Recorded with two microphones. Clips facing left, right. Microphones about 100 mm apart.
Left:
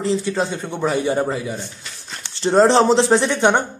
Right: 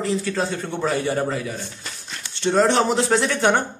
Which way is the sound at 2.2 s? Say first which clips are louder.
Left 4 dB; 30° left (ahead or behind).